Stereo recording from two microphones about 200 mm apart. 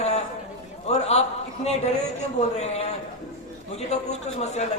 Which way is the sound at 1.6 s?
35° left (ahead or behind).